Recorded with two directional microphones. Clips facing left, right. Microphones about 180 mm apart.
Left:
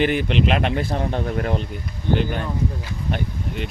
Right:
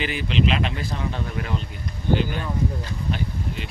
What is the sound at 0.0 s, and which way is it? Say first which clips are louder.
Speech: left 4 dB; 55° left (ahead or behind).